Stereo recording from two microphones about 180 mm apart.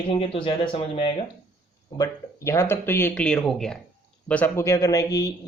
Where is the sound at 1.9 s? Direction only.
15° left (ahead or behind).